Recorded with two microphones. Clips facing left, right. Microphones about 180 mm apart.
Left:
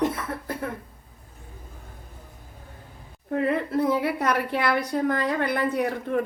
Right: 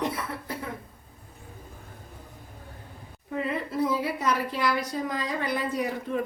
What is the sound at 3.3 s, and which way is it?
A woman's voice, 60° left (ahead or behind).